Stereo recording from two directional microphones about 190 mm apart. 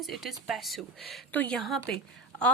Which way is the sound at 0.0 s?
Centre (ahead or behind).